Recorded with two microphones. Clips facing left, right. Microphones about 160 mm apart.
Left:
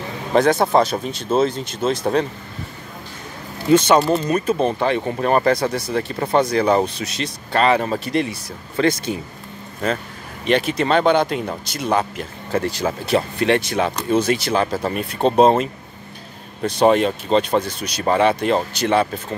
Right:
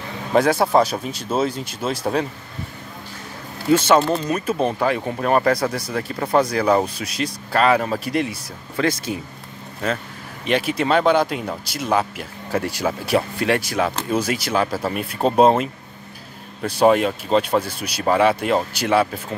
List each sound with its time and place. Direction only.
0.3 s speech: 10° right (ahead or behind)
3.7 s speech: 5° right (ahead or behind)
5.8 s speech: 25° left (ahead or behind)
6.0 s speech: centre (ahead or behind)
10.4 s speech: 5° right (ahead or behind)